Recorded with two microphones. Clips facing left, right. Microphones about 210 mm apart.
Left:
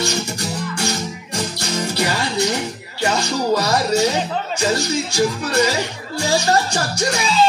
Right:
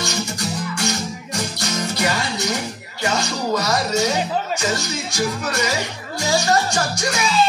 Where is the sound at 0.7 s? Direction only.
30° left (ahead or behind).